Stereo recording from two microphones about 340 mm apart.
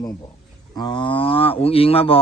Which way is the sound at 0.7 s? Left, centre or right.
Centre.